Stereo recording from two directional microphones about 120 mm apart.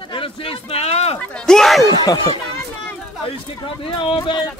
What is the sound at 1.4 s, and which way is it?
Speech, 5° left (ahead or behind).